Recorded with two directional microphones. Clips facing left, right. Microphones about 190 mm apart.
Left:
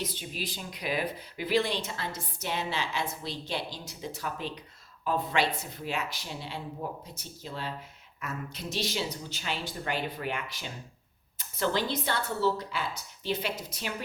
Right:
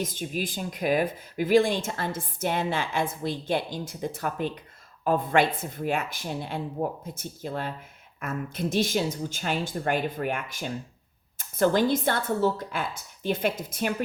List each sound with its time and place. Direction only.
0.0 s speech: 45° right (ahead or behind)